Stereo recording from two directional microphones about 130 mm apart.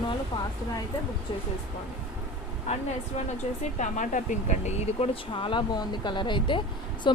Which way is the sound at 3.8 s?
70° left (ahead or behind).